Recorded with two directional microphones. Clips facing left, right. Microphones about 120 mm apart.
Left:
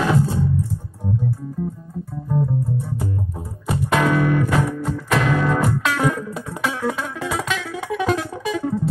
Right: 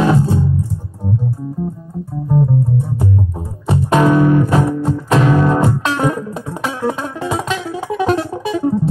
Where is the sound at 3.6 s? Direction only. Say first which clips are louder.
Right 6 dB; 25° right (ahead or behind).